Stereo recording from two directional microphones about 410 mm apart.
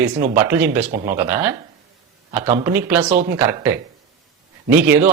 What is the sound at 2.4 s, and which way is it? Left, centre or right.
Speech, centre.